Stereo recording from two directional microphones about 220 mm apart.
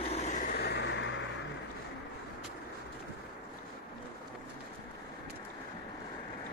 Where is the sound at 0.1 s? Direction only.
30° left (ahead or behind); by 1.2 s 55° left (ahead or behind).